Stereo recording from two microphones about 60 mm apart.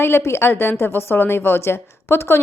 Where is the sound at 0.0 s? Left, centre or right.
Left.